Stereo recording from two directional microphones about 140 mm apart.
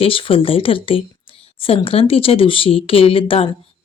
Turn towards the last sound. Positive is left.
turn(degrees=40)  # may be behind; listen again after turning